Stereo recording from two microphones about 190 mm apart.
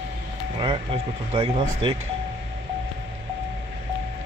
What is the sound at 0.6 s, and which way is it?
Speech, 30° right (ahead or behind).